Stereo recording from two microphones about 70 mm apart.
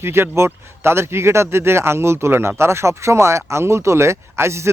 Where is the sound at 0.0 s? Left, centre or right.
Right.